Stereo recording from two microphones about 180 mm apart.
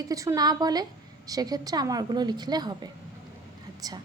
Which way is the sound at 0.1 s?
20° right (ahead or behind).